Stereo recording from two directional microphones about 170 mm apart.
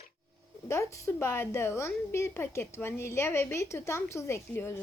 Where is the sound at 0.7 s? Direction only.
15° left (ahead or behind).